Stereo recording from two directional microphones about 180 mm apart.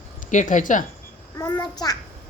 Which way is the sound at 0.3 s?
45° left (ahead or behind).